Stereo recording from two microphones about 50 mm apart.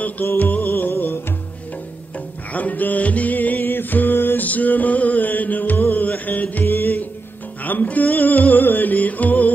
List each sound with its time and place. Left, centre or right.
0.0 s music: left
2.5 s music: left
4.5 s music: left
6.6 s music: left